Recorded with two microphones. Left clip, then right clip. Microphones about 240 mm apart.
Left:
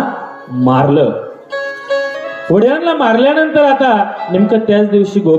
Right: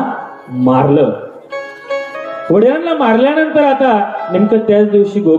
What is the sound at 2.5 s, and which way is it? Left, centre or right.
A man's voice, left.